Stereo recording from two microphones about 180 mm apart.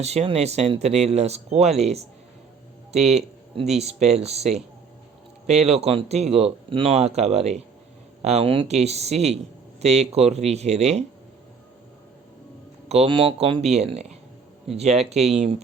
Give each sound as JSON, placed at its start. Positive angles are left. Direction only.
{"t": 0.0, "sound": "speech", "side_deg": -35}
{"t": 12.9, "sound": "speech", "side_deg": -35}